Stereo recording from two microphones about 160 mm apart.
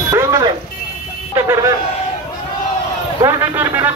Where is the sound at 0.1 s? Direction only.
20° right (ahead or behind).